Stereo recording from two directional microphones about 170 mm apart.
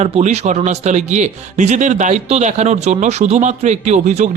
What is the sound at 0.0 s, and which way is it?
Speech, 40° right (ahead or behind).